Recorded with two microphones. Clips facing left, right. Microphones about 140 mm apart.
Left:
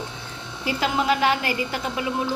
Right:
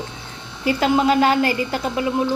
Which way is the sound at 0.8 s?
40° right (ahead or behind).